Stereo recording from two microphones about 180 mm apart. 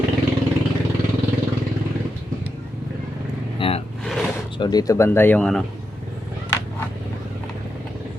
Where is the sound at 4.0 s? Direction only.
Centre (ahead or behind).